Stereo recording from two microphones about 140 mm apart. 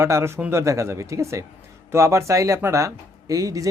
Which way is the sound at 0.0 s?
20° right (ahead or behind).